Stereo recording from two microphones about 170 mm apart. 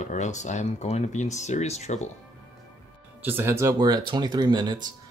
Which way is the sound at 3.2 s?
15° right (ahead or behind).